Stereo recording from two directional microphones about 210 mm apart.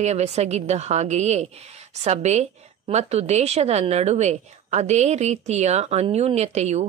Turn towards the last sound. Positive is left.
turn(degrees=-30)  # may be behind; listen again after turning